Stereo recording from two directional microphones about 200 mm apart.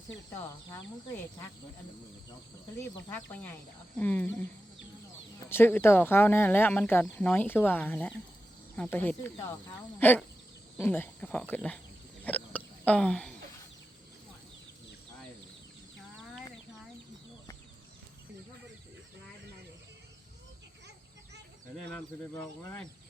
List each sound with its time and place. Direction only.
0.7 s speech: 20° left (ahead or behind)
3.1 s speech: 10° left (ahead or behind)
5.5 s speech: 10° left (ahead or behind)
12.2 s a sound: 5° left (ahead or behind)